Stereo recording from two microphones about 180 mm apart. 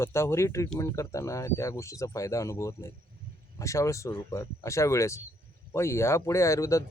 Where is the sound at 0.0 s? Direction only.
15° left (ahead or behind).